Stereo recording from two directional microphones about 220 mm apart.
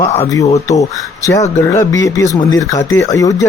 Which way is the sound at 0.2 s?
15° left (ahead or behind).